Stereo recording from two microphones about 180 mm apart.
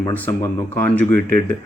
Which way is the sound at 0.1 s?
10° left (ahead or behind).